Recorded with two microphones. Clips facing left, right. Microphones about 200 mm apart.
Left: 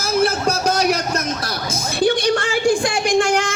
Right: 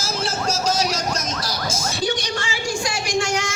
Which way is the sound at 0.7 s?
60° left (ahead or behind).